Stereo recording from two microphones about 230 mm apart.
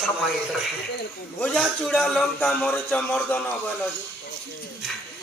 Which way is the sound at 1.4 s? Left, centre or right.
Centre.